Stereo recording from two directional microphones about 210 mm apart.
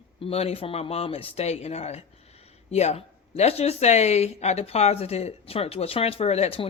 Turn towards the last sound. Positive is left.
turn(degrees=30)  # may be behind; listen again after turning